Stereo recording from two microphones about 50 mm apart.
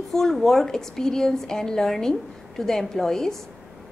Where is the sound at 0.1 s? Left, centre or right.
Centre.